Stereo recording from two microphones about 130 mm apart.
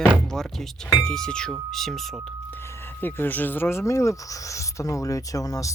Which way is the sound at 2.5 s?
20° left (ahead or behind).